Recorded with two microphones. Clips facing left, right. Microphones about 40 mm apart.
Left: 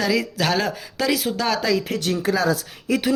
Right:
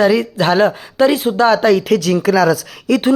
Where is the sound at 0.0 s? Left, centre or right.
Right.